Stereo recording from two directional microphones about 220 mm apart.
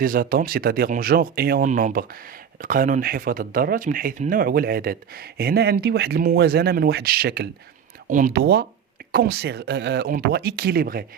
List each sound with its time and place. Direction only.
0.0 s speech: 40° right (ahead or behind)